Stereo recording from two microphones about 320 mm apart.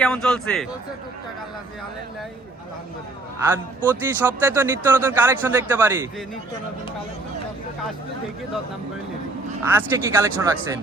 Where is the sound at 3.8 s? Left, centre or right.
Centre.